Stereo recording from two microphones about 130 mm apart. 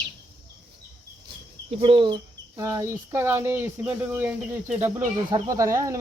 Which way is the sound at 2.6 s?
20° right (ahead or behind).